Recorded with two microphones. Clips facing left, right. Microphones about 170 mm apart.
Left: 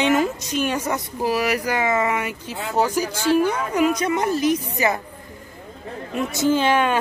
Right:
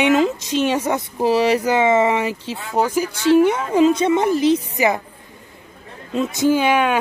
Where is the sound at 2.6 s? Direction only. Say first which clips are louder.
Even; centre (ahead or behind).